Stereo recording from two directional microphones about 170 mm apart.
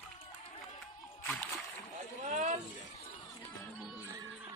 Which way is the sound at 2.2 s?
45° right (ahead or behind).